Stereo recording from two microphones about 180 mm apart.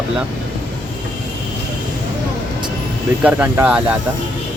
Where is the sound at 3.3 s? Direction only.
10° right (ahead or behind).